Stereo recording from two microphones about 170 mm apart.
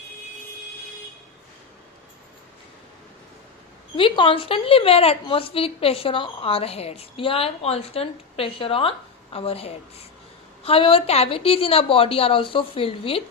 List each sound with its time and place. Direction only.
3.9 s a woman's voice: 30° left (ahead or behind)